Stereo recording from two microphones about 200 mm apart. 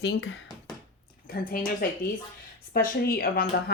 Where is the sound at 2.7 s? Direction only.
45° left (ahead or behind).